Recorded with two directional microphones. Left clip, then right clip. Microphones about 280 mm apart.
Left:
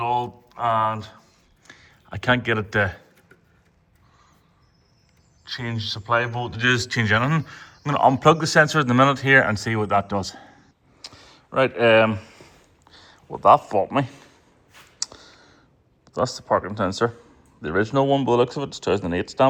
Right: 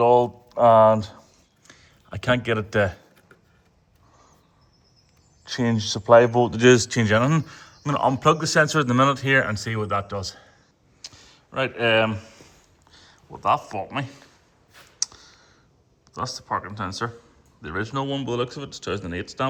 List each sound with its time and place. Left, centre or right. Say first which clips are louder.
0.0 s speech: right 6 dB; right
1.6 s speech: left 4 dB; centre
5.5 s speech: right 4 dB; right; by 10.6 s centre
11.0 s a sound: left 1 dB; centre
14.7 s clicking: right 2 dB; centre
16.0 s a man's voice: left 6 dB; centre